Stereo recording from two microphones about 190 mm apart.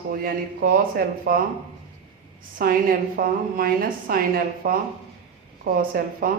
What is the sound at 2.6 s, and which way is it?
Speech, 50° right (ahead or behind).